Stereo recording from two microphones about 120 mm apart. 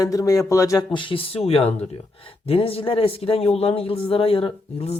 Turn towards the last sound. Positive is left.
turn(degrees=55)  # may be behind; listen again after turning